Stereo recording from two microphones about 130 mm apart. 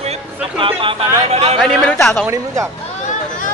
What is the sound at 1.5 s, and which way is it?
Speech, 5° left (ahead or behind).